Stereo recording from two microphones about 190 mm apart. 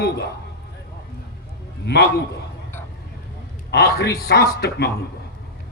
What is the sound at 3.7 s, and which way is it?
A man's voice, 60° left (ahead or behind).